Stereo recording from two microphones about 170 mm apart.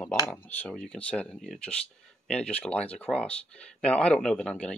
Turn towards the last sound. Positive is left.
turn(degrees=5)  # may be behind; listen again after turning